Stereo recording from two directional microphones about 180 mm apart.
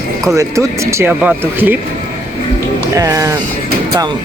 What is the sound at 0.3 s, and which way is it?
Speech, 15° right (ahead or behind).